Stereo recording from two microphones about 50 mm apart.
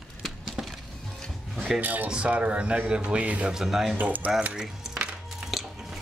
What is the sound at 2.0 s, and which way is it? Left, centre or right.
A man's voice, right.